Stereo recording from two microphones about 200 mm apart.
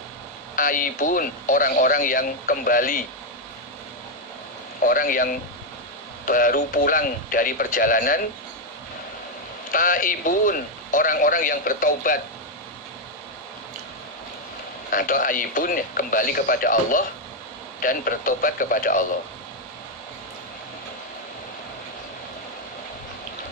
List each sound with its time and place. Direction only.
0.5 s speech: 45° left (ahead or behind)
4.8 s speech: 45° left (ahead or behind)
9.7 s speech: 45° left (ahead or behind)
14.8 s speech: 45° left (ahead or behind)